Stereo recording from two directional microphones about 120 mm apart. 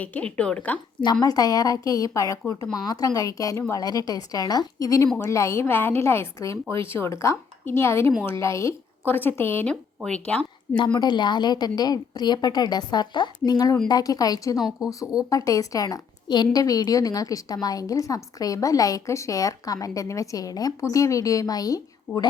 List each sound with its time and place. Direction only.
0.0 s speech: 10° left (ahead or behind)
1.2 s a woman's voice: 30° left (ahead or behind); by 10.4 s 10° left (ahead or behind)
10.9 s a woman's voice: 40° left (ahead or behind)
15.0 s speech: 5° right (ahead or behind)
15.3 s a woman's voice: 30° left (ahead or behind)